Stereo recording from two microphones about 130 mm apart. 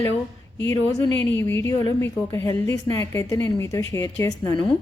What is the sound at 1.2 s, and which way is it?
A woman's voice, 15° left (ahead or behind).